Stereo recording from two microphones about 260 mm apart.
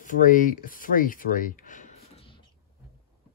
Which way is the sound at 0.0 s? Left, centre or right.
Left.